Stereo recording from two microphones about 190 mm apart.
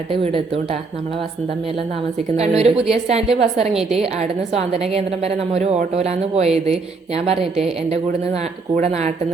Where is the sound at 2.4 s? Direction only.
35° right (ahead or behind).